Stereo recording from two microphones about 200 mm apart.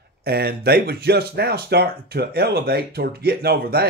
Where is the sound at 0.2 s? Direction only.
50° right (ahead or behind).